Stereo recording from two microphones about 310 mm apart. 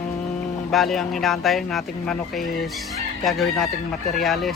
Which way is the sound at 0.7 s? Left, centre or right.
Centre.